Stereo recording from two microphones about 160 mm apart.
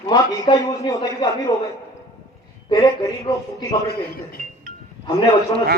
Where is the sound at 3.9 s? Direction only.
70° left (ahead or behind).